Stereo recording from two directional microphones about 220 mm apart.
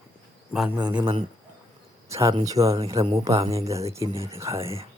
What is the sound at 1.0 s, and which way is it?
Speech, 25° right (ahead or behind).